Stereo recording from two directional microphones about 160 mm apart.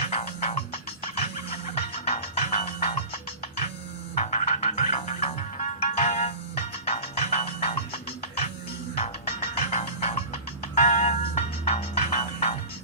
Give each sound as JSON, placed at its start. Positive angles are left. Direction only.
{"t": 0.0, "sound": "music", "side_deg": 40}
{"t": 4.1, "sound": "music", "side_deg": 45}
{"t": 9.0, "sound": "music", "side_deg": 45}